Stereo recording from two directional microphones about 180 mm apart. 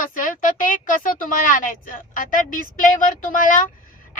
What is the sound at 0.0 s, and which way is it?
A woman's voice, 45° left (ahead or behind).